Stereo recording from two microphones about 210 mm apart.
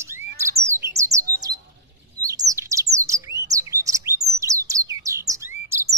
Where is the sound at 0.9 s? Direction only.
15° right (ahead or behind).